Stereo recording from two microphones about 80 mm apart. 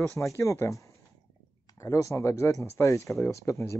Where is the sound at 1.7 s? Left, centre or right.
Left.